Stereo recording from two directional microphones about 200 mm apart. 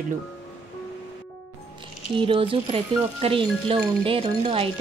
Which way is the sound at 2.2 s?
25° right (ahead or behind).